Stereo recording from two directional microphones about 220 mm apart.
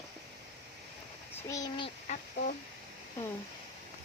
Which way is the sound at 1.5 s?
15° left (ahead or behind).